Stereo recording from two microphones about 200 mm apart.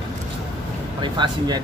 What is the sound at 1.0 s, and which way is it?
Speech, 20° right (ahead or behind).